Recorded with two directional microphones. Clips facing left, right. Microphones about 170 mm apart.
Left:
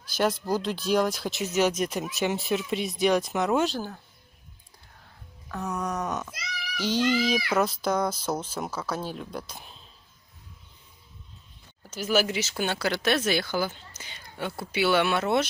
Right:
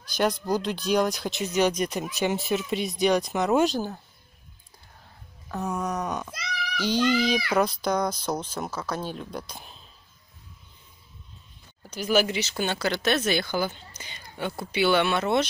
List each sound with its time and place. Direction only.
0.0 s speech: 5° left (ahead or behind)
3.5 s speech: 15° right (ahead or behind)
5.5 s a sound: 20° right (ahead or behind)
5.8 s speech: centre (ahead or behind)
11.9 s speech: 5° left (ahead or behind)